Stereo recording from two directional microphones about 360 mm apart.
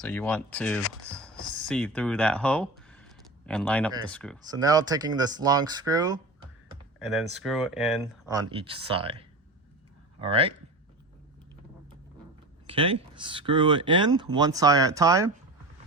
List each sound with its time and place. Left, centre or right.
0.0 s speech: centre
1.0 s a sound: centre
4.1 s speech: centre
4.4 s speech: centre
12.6 s speech: centre